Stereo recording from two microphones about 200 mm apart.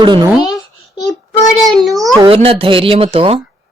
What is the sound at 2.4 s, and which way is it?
Speech, 25° right (ahead or behind).